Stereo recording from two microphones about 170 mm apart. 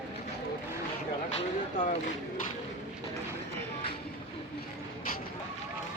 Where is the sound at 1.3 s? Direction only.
45° left (ahead or behind).